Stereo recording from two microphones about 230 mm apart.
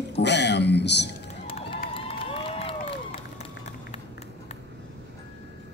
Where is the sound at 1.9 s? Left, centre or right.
Left.